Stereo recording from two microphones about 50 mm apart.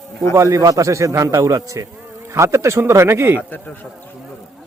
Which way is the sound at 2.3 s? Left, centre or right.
Right.